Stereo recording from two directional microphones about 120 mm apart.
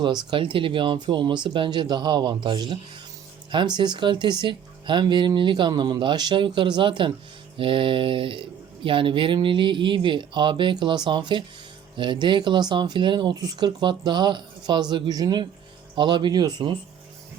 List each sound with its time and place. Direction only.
0.0 s speech: 40° right (ahead or behind)